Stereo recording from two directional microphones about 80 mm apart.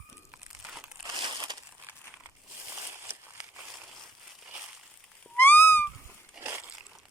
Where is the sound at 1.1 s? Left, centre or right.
Right.